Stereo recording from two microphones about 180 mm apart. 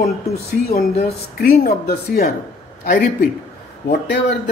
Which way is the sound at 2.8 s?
50° left (ahead or behind).